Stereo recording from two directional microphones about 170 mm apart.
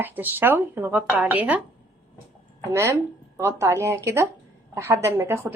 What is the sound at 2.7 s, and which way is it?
Speech, 15° right (ahead or behind).